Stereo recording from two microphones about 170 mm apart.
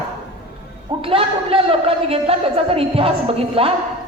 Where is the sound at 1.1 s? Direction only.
35° right (ahead or behind).